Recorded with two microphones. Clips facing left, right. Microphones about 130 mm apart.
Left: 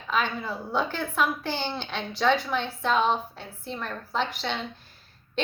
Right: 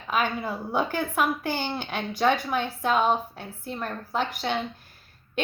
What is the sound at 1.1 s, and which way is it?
A woman's voice, 50° right (ahead or behind).